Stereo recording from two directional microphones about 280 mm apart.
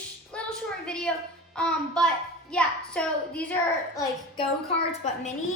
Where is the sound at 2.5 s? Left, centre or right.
Centre.